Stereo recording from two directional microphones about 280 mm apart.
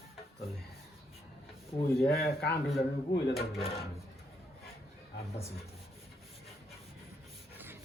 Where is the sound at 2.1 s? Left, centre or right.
Left.